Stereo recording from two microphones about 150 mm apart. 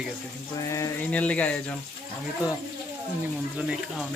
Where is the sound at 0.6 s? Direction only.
20° left (ahead or behind).